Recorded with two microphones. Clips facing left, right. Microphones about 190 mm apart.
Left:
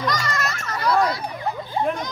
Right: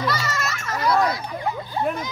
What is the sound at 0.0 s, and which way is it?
Children playing, 5° right (ahead or behind).